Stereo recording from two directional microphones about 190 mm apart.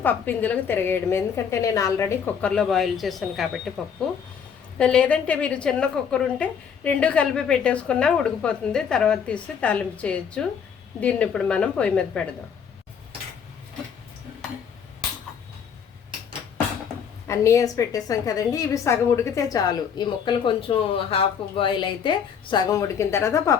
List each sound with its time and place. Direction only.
0.0 s a woman's voice: 10° left (ahead or behind)
17.2 s a woman's voice: 15° left (ahead or behind)